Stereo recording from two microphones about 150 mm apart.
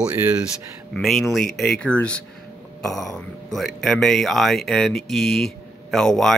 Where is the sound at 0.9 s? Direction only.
Centre (ahead or behind).